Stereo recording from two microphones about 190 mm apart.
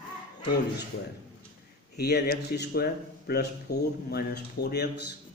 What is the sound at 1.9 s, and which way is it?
Speech, 55° left (ahead or behind).